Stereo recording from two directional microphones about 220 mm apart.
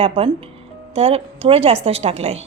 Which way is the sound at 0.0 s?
25° right (ahead or behind).